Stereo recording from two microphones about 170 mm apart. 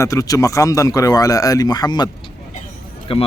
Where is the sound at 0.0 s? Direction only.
20° left (ahead or behind).